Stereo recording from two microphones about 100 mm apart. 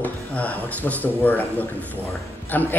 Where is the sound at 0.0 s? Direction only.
15° left (ahead or behind).